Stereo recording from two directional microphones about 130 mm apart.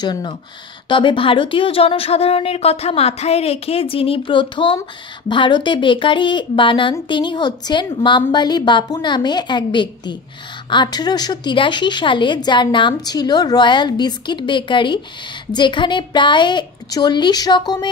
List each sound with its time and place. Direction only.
0.0 s a woman's voice: 35° left (ahead or behind)